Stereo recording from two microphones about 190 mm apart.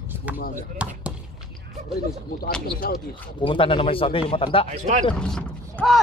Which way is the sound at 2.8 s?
50° left (ahead or behind).